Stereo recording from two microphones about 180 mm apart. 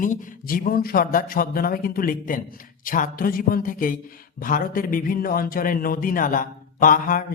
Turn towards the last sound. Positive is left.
turn(degrees=50)  # may be behind; listen again after turning